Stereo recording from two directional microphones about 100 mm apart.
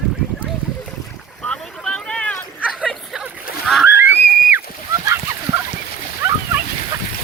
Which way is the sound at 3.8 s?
20° right (ahead or behind).